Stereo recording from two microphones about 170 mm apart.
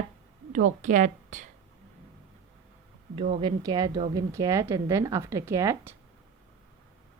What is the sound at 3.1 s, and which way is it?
Speech, 45° right (ahead or behind).